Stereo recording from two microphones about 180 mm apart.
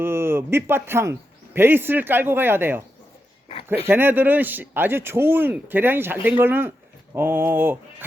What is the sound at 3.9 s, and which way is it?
Speech, 10° right (ahead or behind).